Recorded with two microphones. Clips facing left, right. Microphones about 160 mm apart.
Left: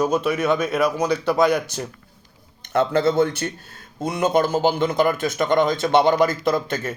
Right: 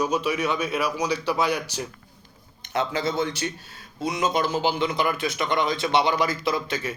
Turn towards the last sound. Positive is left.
turn(degrees=50)  # may be behind; listen again after turning